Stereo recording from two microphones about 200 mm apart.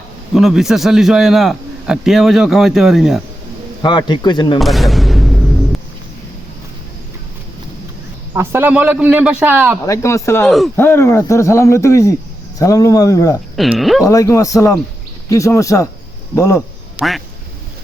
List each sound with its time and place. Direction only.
0.3 s a man's voice: centre (ahead or behind)
3.8 s speech: 20° left (ahead or behind)
4.6 s a sound: centre (ahead or behind)
8.4 s a man's voice: 10° right (ahead or behind)
9.8 s speech: 15° left (ahead or behind)
10.4 s a man's voice: centre (ahead or behind)
10.8 s speech: 10° left (ahead or behind)
13.6 s a man's voice: centre (ahead or behind)
14.0 s speech: 15° left (ahead or behind)
17.0 s speech: centre (ahead or behind)